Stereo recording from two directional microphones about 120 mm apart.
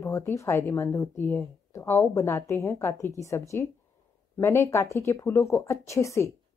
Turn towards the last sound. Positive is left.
turn(degrees=25)  # may be behind; listen again after turning